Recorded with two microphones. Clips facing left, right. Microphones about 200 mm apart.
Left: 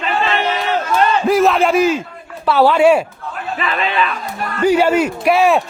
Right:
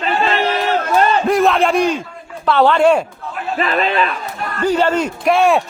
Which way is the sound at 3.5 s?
40° right (ahead or behind).